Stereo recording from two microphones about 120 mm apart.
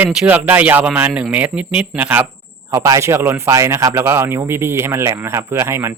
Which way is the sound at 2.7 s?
25° right (ahead or behind).